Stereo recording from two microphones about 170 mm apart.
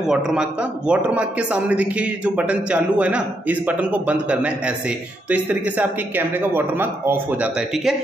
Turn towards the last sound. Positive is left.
turn(degrees=-5)  # may be behind; listen again after turning